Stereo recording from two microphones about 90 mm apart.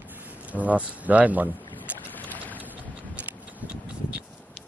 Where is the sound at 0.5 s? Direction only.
15° right (ahead or behind).